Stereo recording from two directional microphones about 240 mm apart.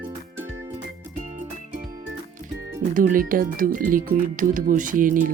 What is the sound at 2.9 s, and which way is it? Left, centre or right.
Speech, right.